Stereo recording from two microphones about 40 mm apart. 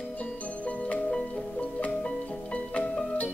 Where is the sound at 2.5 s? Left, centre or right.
Left.